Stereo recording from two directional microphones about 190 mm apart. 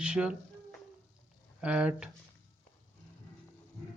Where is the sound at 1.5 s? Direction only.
5° right (ahead or behind).